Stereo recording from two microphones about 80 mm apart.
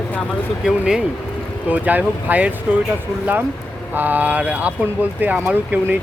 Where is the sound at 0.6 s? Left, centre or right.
Centre.